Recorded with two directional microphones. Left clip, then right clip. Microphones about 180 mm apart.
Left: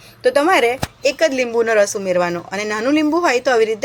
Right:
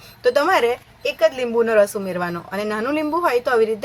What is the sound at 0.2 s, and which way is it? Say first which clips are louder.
Speech: left 3 dB; 15° left (ahead or behind).